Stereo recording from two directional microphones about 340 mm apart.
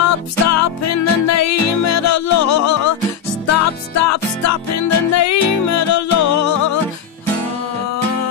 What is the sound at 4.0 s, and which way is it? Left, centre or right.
Music, left.